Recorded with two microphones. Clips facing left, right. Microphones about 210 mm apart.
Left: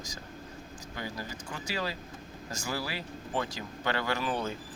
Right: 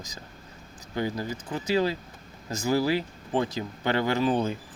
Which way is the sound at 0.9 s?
25° right (ahead or behind).